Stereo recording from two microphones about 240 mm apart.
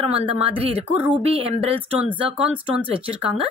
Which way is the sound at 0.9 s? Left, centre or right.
Centre.